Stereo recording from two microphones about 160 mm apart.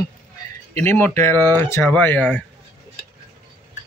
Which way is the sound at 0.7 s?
15° left (ahead or behind).